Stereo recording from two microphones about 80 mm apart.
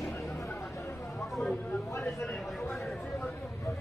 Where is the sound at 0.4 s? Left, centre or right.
Left.